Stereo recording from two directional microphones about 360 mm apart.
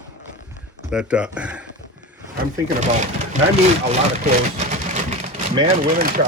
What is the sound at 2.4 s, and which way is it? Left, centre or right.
Speech, centre.